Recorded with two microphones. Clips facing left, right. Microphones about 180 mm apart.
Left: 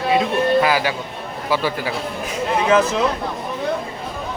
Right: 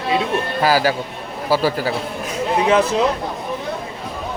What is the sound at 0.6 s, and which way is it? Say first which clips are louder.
A man's voice: right 2 dB; 35° right (ahead or behind).